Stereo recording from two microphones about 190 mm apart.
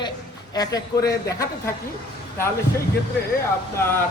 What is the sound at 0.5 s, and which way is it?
A man's voice, 20° left (ahead or behind).